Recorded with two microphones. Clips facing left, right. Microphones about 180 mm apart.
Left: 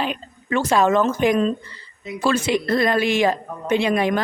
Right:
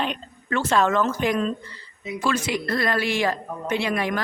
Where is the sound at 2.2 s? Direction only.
30° left (ahead or behind).